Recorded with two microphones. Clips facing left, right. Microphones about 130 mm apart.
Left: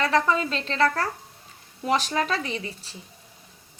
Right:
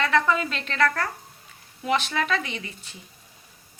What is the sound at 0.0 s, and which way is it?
Frying, 35° left (ahead or behind).